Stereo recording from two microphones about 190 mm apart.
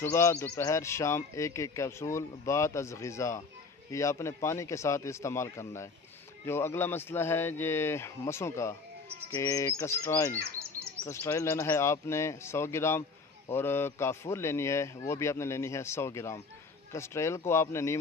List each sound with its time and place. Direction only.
0.0 s speech: 15° left (ahead or behind)
10.6 s bird: 15° right (ahead or behind)
11.0 s speech: 15° left (ahead or behind)